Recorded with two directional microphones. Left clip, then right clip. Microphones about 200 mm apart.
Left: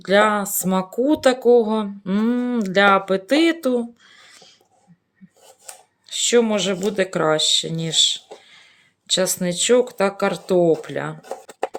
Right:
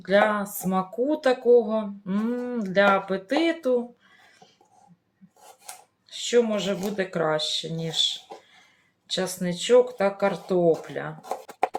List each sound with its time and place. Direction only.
0.0 s speech: 60° left (ahead or behind)
6.1 s speech: 60° left (ahead or behind)
11.2 s a sound: centre (ahead or behind)